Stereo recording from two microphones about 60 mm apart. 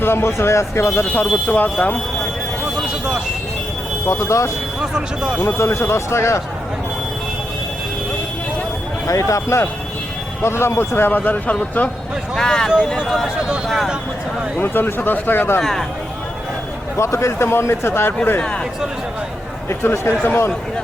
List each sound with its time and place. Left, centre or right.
0.0 s speech: left
1.5 s a man's voice: left
4.0 s speech: left
4.8 s speech: centre
5.4 s speech: left
9.0 s speech: left
11.2 s a man's voice: left
12.4 s speech: centre
14.6 s a man's voice: left
17.0 s speech: left
18.3 s speech: centre
19.8 s a man's voice: left